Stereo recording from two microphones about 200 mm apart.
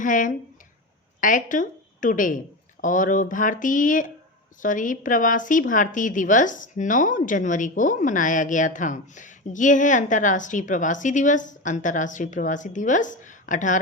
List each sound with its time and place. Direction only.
0.0 s a woman's voice: 40° left (ahead or behind)